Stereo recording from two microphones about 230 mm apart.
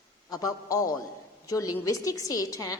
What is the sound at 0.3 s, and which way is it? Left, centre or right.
A woman's voice, centre.